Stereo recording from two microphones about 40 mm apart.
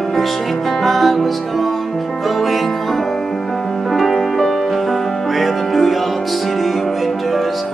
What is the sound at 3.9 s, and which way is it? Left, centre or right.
Music, centre.